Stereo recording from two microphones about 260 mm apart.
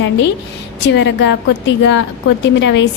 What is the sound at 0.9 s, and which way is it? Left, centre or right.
Speech, left.